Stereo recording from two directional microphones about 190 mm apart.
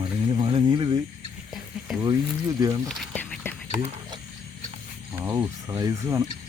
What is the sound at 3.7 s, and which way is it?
Speech, 35° right (ahead or behind).